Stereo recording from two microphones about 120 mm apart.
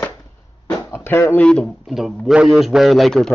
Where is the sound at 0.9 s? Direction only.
20° left (ahead or behind).